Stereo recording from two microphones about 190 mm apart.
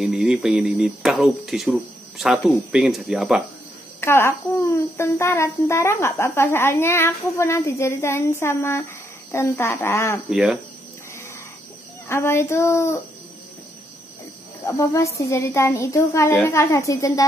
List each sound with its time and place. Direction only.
0.0 s speech: centre (ahead or behind)
4.0 s a child's voice: 15° left (ahead or behind)
10.3 s speech: 5° right (ahead or behind)
12.1 s a child's voice: 15° left (ahead or behind)
14.7 s a child's voice: 15° left (ahead or behind)